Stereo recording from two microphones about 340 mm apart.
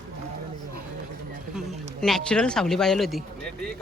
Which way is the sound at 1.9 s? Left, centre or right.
Centre.